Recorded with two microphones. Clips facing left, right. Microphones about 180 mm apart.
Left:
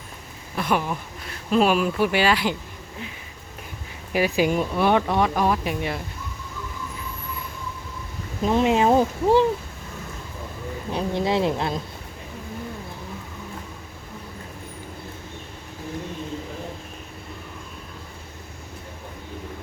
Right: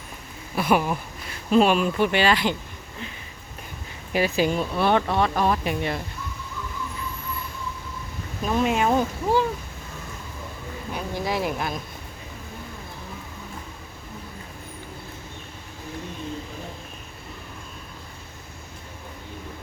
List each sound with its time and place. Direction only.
0.5 s speech: 10° right (ahead or behind); by 2.6 s 5° left (ahead or behind)
4.1 s speech: 10° left (ahead or behind)
8.4 s speech: 20° left (ahead or behind)
10.9 s speech: 25° left (ahead or behind)